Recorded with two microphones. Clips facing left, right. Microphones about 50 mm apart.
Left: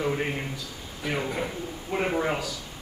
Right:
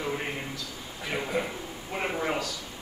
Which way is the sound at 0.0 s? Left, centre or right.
Centre.